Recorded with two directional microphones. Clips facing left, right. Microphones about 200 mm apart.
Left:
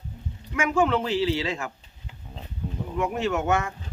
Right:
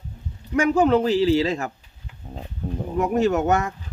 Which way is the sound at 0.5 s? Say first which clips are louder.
Right 5 dB; 35° right (ahead or behind).